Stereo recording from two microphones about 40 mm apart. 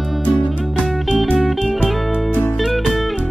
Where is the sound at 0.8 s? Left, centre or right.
Centre.